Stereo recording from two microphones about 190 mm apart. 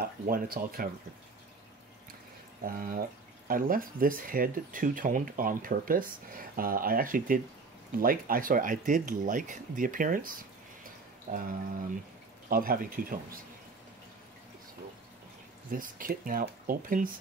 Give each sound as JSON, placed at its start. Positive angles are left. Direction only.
{"t": 0.0, "sound": "speech", "side_deg": -50}
{"t": 2.6, "sound": "speech", "side_deg": -45}
{"t": 12.4, "sound": "speech", "side_deg": -50}
{"t": 15.7, "sound": "speech", "side_deg": -45}